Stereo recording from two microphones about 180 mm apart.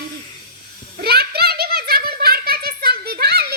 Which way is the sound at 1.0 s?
60° right (ahead or behind).